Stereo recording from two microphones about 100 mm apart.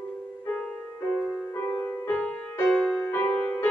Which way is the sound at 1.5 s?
20° left (ahead or behind).